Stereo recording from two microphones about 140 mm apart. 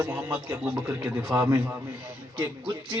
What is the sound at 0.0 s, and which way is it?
Speech, 10° right (ahead or behind).